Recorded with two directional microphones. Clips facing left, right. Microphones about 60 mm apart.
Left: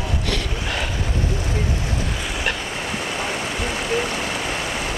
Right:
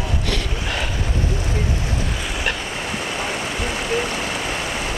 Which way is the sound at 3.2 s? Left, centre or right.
Right.